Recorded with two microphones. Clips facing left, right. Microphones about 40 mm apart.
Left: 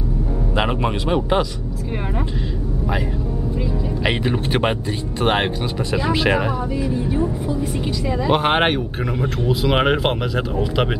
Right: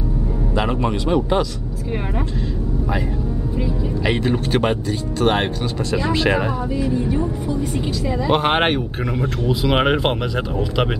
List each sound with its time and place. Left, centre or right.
0.6 s a man's voice: left
4.0 s speech: centre
5.9 s speech: centre